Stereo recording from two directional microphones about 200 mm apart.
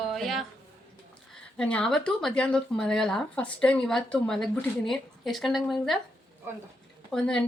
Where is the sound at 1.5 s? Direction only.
5° left (ahead or behind).